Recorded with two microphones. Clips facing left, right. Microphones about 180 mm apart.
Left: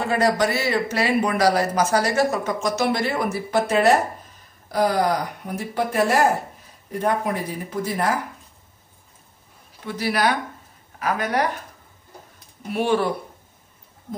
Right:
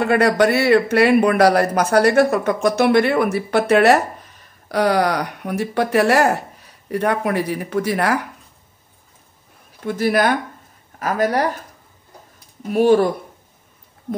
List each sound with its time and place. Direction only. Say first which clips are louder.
0.0 s speech: right 5 dB; 65° right (ahead or behind)
9.8 s a woman's voice: right 5 dB; 50° right (ahead or behind)
12.7 s a woman's voice: right 7 dB; 40° right (ahead or behind)